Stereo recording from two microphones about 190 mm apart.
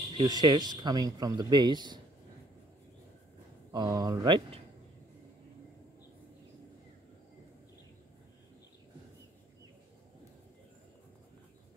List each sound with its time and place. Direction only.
0.2 s speech: 20° right (ahead or behind)
3.7 s speech: 20° right (ahead or behind)